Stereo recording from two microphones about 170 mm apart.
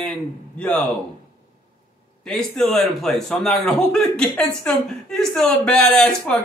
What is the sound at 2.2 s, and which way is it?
A man's voice, 5° left (ahead or behind).